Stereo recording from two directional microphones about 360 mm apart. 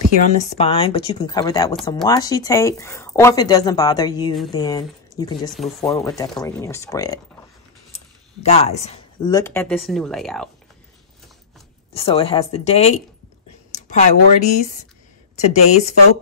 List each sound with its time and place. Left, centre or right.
0.4 s speech: centre
5.5 s speech: centre
11.9 s speech: centre